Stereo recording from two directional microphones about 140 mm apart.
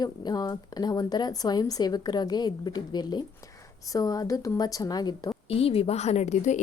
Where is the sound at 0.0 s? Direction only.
30° left (ahead or behind).